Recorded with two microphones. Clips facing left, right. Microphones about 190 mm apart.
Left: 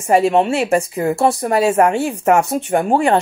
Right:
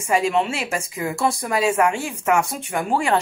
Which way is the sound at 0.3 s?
50° left (ahead or behind).